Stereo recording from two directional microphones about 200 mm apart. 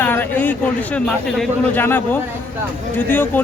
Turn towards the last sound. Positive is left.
turn(degrees=10)  # may be behind; listen again after turning